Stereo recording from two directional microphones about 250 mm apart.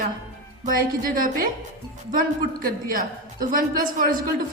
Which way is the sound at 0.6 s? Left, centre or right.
Right.